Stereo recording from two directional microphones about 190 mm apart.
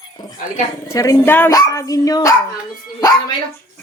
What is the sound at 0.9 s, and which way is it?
Speech, 15° left (ahead or behind).